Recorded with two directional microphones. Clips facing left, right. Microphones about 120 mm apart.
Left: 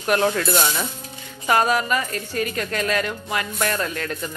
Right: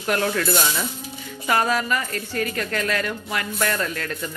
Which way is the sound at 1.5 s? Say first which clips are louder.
Left 2 dB; 20° left (ahead or behind).